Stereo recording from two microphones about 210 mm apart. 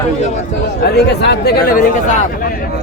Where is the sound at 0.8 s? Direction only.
50° left (ahead or behind).